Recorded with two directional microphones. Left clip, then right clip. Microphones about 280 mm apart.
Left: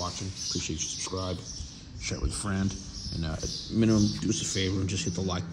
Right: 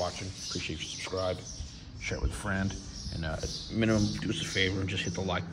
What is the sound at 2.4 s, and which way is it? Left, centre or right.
Speech, centre.